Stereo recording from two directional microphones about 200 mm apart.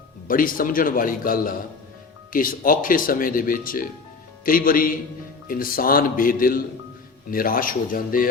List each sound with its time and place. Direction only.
0.3 s speech: 45° left (ahead or behind)